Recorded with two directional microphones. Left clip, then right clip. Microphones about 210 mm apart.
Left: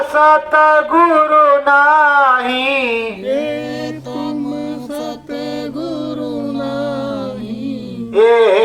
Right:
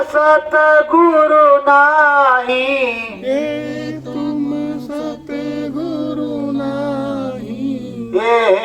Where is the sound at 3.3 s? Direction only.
25° right (ahead or behind).